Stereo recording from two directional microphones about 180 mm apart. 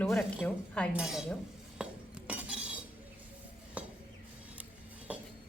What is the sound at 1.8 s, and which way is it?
Cutlery, 5° right (ahead or behind).